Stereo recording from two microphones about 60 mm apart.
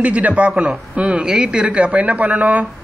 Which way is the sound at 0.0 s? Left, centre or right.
Right.